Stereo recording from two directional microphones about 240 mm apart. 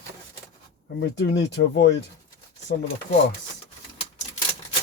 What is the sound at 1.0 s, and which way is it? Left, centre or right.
Speech, left.